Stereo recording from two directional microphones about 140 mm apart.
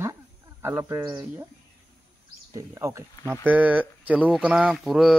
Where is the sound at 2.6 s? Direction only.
20° right (ahead or behind); by 5.2 s centre (ahead or behind).